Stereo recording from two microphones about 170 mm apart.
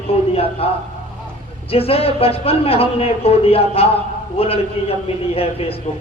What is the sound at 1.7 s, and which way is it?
A man's voice, 35° left (ahead or behind).